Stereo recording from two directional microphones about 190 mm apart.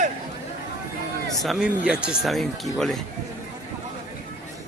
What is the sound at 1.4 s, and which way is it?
Speech, centre (ahead or behind).